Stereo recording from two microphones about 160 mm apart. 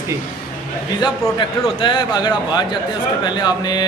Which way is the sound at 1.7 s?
30° left (ahead or behind).